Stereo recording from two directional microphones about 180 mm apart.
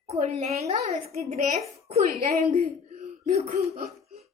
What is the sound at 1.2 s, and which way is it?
Speech, 50° right (ahead or behind).